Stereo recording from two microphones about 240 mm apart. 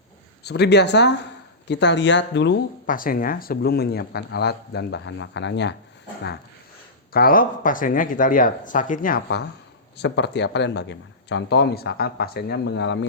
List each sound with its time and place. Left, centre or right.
0.4 s speech: left
2.8 s speech: left
7.1 s speech: left